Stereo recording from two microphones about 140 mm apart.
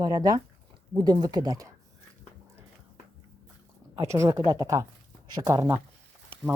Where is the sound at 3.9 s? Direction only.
20° right (ahead or behind).